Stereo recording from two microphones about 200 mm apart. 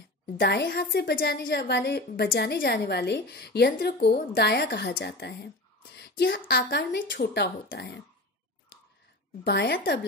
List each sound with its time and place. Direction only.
0.4 s a woman's voice: 55° left (ahead or behind)
9.4 s speech: 55° left (ahead or behind)